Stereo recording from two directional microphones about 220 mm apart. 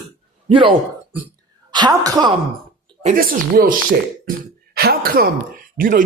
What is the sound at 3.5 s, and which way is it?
Speech, 40° right (ahead or behind).